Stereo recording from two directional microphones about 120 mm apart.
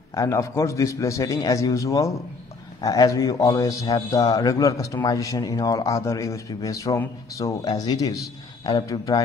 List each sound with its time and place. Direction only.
0.1 s a man's voice: 25° left (ahead or behind)